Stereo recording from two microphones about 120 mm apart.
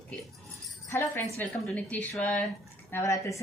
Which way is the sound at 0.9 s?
20° left (ahead or behind).